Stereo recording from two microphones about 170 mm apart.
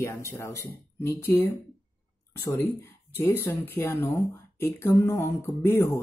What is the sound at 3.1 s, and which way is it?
Speech, 15° left (ahead or behind).